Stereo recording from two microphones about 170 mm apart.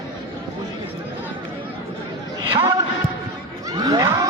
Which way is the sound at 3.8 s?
20° right (ahead or behind).